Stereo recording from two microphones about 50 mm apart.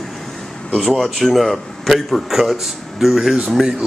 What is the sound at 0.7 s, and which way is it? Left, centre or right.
A man's voice, centre.